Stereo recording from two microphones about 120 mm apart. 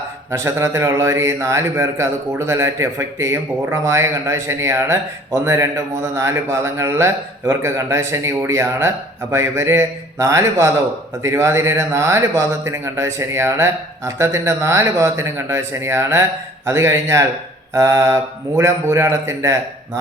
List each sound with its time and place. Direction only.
0.3 s a man's voice: 25° right (ahead or behind)